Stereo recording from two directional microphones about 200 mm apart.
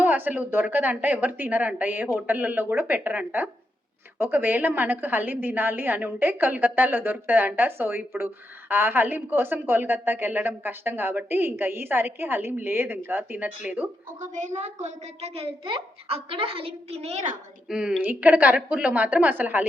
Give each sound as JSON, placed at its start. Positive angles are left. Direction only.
{"t": 0.0, "sound": "a woman's voice", "side_deg": -10}
{"t": 14.2, "sound": "a woman's voice", "side_deg": -35}
{"t": 17.7, "sound": "a woman's voice", "side_deg": -5}